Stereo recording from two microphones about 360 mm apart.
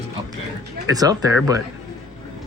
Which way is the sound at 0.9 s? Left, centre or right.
Centre.